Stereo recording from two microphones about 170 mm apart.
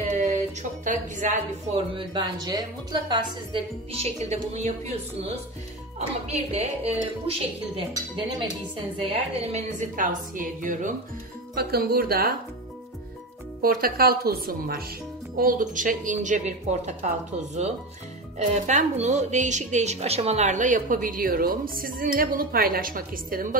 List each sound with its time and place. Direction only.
0.2 s speech: 45° right (ahead or behind)
2.0 s a woman's voice: 25° right (ahead or behind)
8.9 s a woman's voice: 35° right (ahead or behind)
11.5 s a woman's voice: 65° right (ahead or behind)
13.6 s a woman's voice: 60° right (ahead or behind)